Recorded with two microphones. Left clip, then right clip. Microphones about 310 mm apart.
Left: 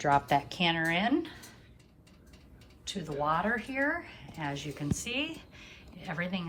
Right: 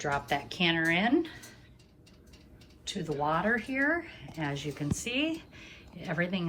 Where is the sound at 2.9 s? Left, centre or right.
Centre.